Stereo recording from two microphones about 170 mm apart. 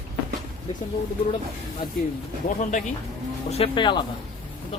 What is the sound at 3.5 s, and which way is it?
Speech, 30° left (ahead or behind).